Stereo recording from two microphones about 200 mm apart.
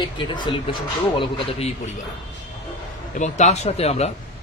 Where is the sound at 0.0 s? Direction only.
25° left (ahead or behind).